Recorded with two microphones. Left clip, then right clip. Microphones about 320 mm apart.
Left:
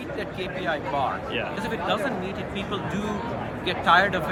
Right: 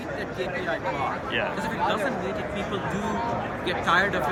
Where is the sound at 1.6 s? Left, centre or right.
Centre.